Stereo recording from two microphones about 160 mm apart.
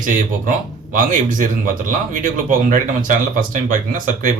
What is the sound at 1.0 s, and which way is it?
Speech, 55° right (ahead or behind).